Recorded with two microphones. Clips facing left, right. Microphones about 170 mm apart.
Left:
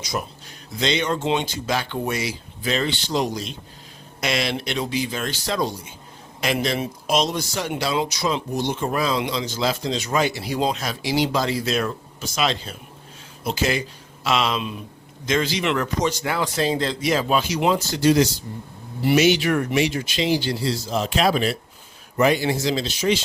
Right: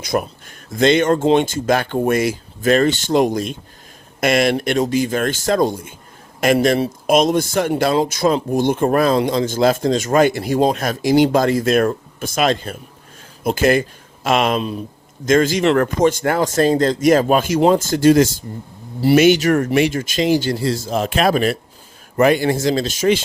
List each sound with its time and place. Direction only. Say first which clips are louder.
0.0 s speech: right 8 dB; 55° right (ahead or behind)